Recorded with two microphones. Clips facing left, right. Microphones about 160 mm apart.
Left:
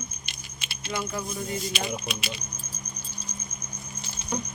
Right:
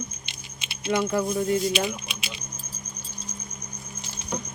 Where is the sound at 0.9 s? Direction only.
65° right (ahead or behind).